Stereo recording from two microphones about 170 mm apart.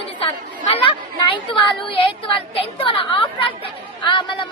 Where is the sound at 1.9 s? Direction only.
30° left (ahead or behind).